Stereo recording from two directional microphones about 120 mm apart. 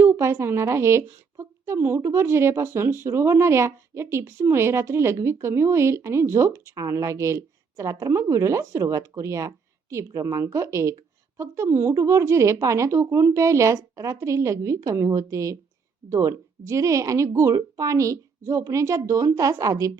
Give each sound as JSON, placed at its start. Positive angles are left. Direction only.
{"t": 0.0, "sound": "a woman's voice", "side_deg": -20}